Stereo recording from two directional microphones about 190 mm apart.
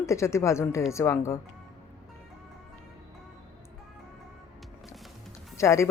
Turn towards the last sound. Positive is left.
turn(degrees=15)  # may be behind; listen again after turning